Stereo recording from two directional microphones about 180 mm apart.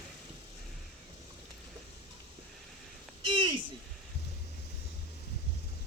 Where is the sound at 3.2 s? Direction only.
25° right (ahead or behind).